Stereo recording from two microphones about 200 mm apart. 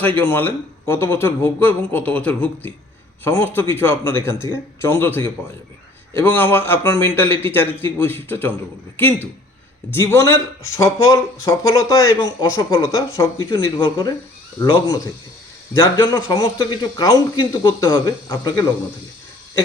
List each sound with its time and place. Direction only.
0.0 s speech: 10° left (ahead or behind)